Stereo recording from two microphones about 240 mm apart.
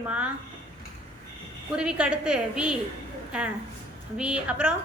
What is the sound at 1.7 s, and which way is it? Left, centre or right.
A woman's voice, centre.